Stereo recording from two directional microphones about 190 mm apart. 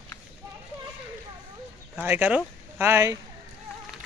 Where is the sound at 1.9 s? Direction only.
10° right (ahead or behind).